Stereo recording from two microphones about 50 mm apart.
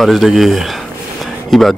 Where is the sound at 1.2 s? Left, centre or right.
Centre.